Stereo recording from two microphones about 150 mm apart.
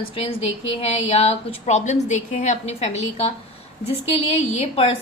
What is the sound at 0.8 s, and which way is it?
A woman's voice, 45° left (ahead or behind).